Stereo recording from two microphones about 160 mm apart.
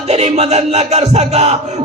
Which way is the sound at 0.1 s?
40° right (ahead or behind).